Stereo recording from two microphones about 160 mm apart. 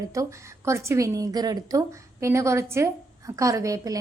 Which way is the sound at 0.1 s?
20° right (ahead or behind).